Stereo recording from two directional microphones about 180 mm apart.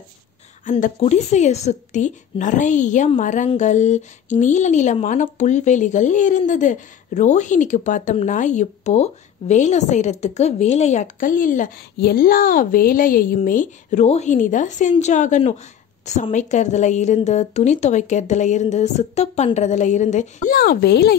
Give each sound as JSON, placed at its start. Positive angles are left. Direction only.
{"t": 0.7, "sound": "a woman's voice", "side_deg": 45}